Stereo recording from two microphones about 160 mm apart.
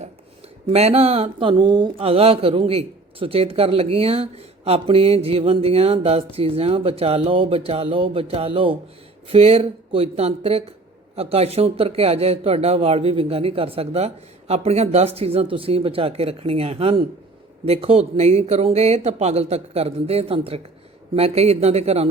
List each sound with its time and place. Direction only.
0.7 s speech: 40° right (ahead or behind)